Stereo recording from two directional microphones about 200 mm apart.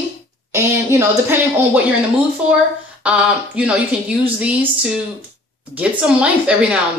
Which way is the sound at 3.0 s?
5° right (ahead or behind).